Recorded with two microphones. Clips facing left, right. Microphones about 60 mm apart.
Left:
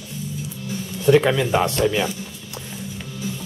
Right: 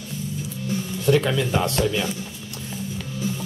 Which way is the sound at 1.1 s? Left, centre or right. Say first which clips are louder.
Left 4 dB; left.